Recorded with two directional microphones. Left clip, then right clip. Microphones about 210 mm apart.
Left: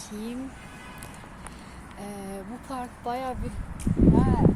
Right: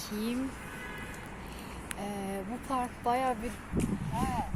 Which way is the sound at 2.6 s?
5° right (ahead or behind).